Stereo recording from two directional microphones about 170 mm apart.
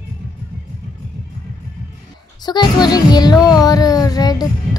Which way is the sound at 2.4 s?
25° left (ahead or behind).